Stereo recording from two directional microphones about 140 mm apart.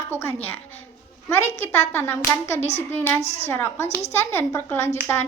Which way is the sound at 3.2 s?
50° left (ahead or behind).